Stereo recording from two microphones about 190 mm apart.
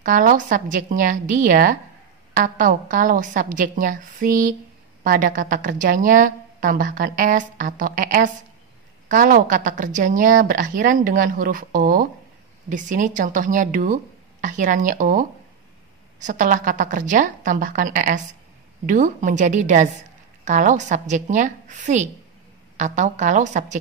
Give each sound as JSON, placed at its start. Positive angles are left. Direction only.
{"t": 0.0, "sound": "a woman's voice", "side_deg": -45}